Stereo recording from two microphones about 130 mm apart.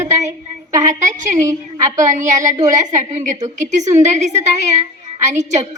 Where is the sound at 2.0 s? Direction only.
70° right (ahead or behind).